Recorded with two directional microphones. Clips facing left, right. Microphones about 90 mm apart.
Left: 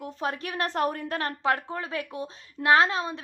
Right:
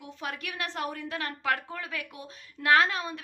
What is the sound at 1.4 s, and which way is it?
A woman's voice, 30° left (ahead or behind).